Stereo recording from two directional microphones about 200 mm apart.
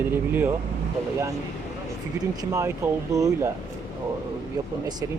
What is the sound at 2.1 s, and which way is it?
Speech, 20° right (ahead or behind).